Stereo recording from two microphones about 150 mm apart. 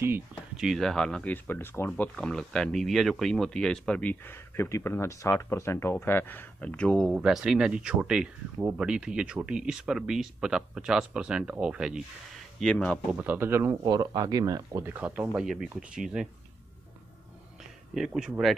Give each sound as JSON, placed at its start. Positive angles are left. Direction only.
{"t": 0.6, "sound": "speech", "side_deg": 0}
{"t": 7.1, "sound": "speech", "side_deg": -5}
{"t": 12.5, "sound": "speech", "side_deg": 5}
{"t": 13.1, "sound": "speech", "side_deg": -10}
{"t": 13.8, "sound": "speech", "side_deg": -25}
{"t": 15.0, "sound": "speech", "side_deg": -10}
{"t": 17.9, "sound": "speech", "side_deg": -5}